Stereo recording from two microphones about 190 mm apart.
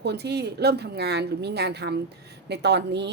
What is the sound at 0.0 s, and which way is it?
A woman's voice, 60° right (ahead or behind).